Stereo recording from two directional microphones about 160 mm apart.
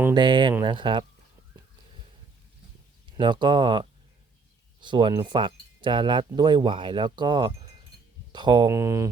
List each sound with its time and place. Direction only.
0.1 s speech: 30° right (ahead or behind)
3.1 s speech: 30° right (ahead or behind)